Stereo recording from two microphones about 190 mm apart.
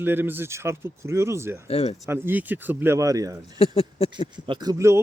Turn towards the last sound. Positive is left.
turn(degrees=-15)  # may be behind; listen again after turning